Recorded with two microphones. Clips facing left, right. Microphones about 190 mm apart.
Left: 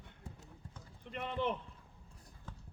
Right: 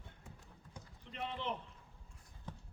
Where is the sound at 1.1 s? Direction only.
55° left (ahead or behind).